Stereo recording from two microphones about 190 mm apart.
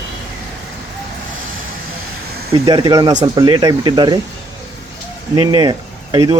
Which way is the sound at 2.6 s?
25° right (ahead or behind).